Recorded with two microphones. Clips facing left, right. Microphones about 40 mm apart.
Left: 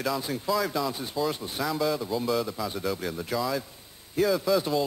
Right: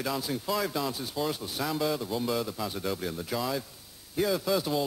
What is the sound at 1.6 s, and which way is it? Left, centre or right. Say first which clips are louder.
Speech: left 2 dB; centre.